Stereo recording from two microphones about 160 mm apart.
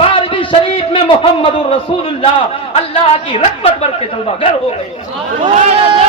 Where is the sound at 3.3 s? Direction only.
35° left (ahead or behind).